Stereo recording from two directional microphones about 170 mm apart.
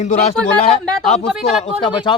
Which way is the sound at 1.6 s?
30° left (ahead or behind).